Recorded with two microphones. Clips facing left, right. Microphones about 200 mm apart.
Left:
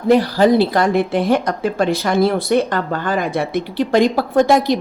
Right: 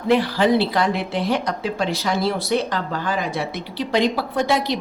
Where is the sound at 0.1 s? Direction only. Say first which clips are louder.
Left 5 dB; 40° left (ahead or behind).